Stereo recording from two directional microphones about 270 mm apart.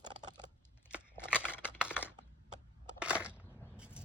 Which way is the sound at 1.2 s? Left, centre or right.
Centre.